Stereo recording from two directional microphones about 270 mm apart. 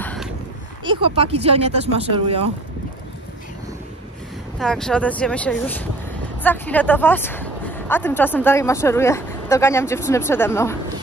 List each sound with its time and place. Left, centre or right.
0.0 s a sound: centre
0.8 s speech: right
4.6 s speech: centre